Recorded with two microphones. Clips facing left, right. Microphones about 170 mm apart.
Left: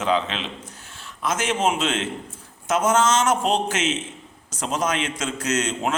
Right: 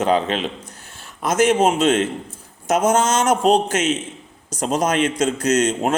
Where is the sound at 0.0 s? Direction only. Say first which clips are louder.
Right 5 dB; 45° right (ahead or behind).